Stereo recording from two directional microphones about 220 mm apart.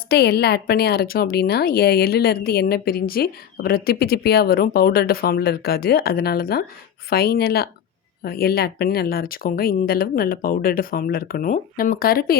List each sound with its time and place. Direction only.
0.1 s a woman's voice: 45° left (ahead or behind)